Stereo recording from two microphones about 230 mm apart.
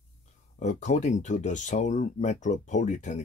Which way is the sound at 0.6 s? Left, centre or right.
Left.